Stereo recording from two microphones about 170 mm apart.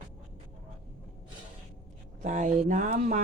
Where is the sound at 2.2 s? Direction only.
45° right (ahead or behind).